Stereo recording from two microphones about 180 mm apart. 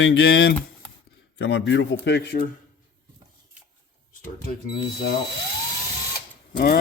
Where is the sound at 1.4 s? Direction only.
75° left (ahead or behind).